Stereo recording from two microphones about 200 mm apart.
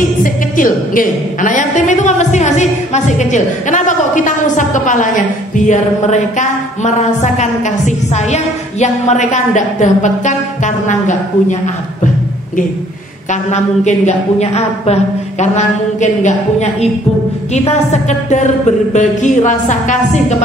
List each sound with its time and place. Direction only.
0.0 s a woman's voice: 40° left (ahead or behind)
13.3 s a woman's voice: 35° left (ahead or behind)
17.9 s a woman's voice: 35° left (ahead or behind)